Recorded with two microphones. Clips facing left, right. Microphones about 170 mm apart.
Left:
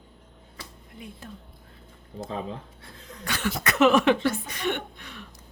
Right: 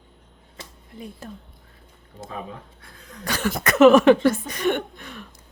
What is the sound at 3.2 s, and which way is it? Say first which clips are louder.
Speech: right 4 dB; 40° right (ahead or behind).